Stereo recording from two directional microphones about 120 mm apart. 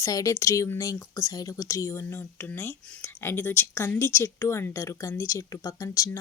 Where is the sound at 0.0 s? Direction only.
30° left (ahead or behind).